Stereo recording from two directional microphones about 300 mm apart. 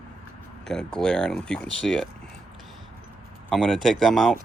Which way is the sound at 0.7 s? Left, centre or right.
Centre.